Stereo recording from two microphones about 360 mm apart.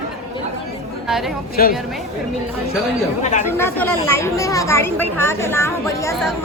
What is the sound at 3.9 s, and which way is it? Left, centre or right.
Speech, right.